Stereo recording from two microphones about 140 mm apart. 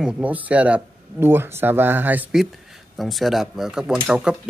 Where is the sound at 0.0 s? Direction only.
10° right (ahead or behind).